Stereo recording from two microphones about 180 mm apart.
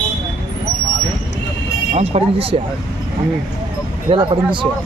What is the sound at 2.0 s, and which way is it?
Speech, 35° right (ahead or behind).